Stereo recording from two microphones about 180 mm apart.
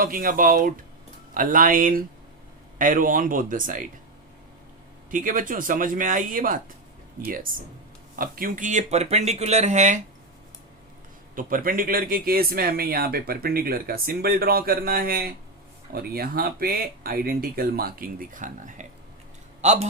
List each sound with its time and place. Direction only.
0.0 s speech: 50° right (ahead or behind)
5.1 s speech: 50° right (ahead or behind)
11.3 s speech: 50° right (ahead or behind)